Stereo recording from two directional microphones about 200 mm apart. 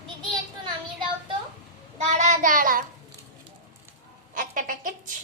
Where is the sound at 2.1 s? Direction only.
35° right (ahead or behind).